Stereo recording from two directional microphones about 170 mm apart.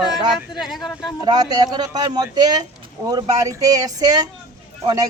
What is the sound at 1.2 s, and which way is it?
Speech, 25° right (ahead or behind).